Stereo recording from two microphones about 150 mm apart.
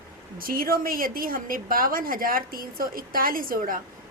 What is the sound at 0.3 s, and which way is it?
A woman's voice, 75° right (ahead or behind).